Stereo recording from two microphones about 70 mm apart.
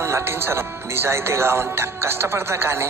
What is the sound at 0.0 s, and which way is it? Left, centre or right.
Speech, right.